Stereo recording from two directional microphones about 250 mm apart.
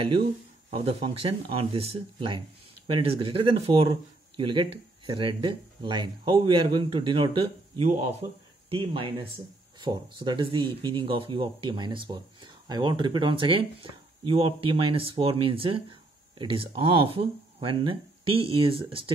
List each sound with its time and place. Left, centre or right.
0.7 s speech: right